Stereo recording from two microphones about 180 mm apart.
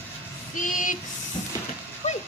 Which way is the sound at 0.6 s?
45° left (ahead or behind).